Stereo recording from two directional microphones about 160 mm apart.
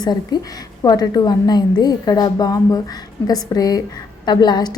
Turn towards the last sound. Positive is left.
turn(degrees=25)  # may be behind; listen again after turning